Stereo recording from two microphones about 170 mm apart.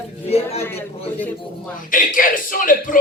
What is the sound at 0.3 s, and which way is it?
Speech, 35° left (ahead or behind).